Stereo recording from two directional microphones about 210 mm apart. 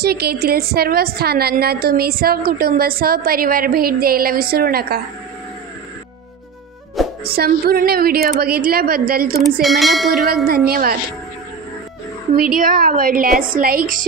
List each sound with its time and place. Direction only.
0.0 s a woman's voice: 50° right (ahead or behind)
7.0 s music: centre (ahead or behind)
7.3 s a woman's voice: 45° right (ahead or behind)
9.4 s a sound: centre (ahead or behind)
10.2 s a woman's voice: 45° right (ahead or behind)
12.4 s a woman's voice: 40° right (ahead or behind)